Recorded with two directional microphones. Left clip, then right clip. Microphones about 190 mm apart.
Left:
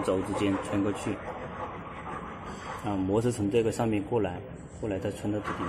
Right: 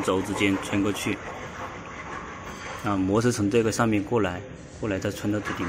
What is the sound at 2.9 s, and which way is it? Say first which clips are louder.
Speech: right 4 dB; 35° right (ahead or behind).